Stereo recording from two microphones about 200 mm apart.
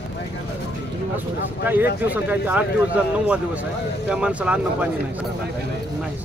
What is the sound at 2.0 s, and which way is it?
Speech, 10° right (ahead or behind).